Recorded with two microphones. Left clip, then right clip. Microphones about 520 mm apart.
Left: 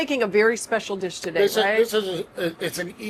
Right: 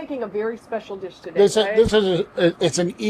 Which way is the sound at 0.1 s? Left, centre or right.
Left.